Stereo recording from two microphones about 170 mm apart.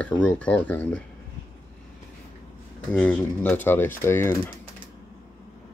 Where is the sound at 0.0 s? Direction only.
5° left (ahead or behind).